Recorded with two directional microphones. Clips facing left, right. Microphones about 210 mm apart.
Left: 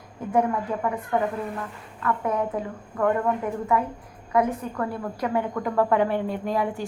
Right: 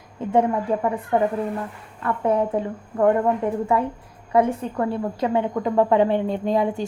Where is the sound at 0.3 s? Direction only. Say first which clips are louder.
Right 4 dB; 30° right (ahead or behind).